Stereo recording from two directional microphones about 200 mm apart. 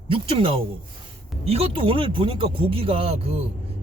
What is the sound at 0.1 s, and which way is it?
Speech, 25° right (ahead or behind).